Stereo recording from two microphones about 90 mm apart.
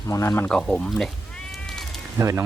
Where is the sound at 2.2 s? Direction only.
35° right (ahead or behind).